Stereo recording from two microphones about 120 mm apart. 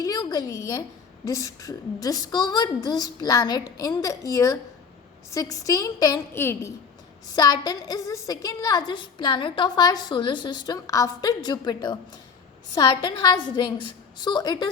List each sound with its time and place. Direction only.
0.0 s a woman's voice: 30° left (ahead or behind)